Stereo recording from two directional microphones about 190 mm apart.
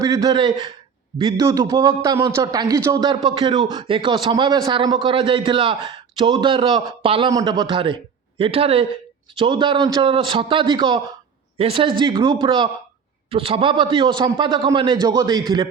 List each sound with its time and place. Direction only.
0.0 s a man's voice: 20° right (ahead or behind)